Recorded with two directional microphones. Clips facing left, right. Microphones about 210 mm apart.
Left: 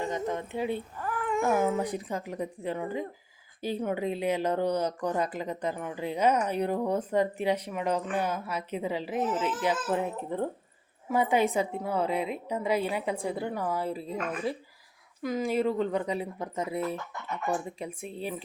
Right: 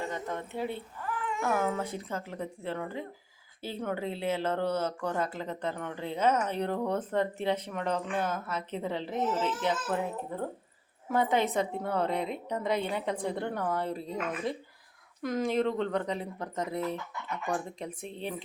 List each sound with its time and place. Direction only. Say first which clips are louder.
0.1 s speech: left 4 dB; 15° left (ahead or behind)
0.9 s cat: left 5 dB; 45° left (ahead or behind)
1.5 s a woman's voice: left 3 dB; 10° left (ahead or behind)
11.1 s a woman's voice: left 2 dB; 10° left (ahead or behind)